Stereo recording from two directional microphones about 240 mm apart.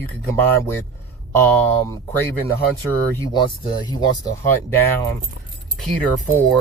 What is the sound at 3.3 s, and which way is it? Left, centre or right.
Speech, centre.